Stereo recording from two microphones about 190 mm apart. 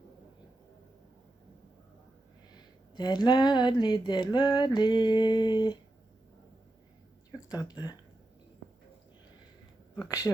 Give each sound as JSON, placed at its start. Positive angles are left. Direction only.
{"t": 2.9, "sound": "a sound", "side_deg": 20}
{"t": 7.3, "sound": "speech", "side_deg": 20}
{"t": 10.1, "sound": "speech", "side_deg": 15}